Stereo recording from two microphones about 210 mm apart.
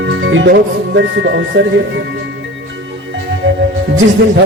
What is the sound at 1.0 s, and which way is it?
Speech, 60° right (ahead or behind).